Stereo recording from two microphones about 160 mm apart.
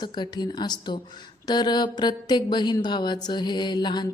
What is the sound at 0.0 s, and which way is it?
A woman's voice, 25° left (ahead or behind).